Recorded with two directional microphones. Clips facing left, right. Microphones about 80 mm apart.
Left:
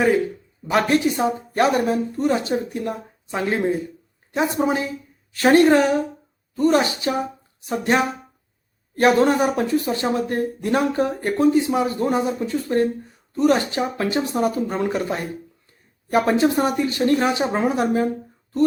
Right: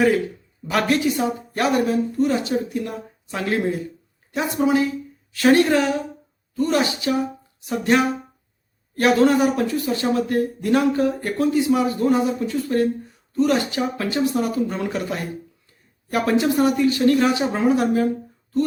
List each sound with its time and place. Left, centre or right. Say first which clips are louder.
0.7 s speech: left 1 dB; left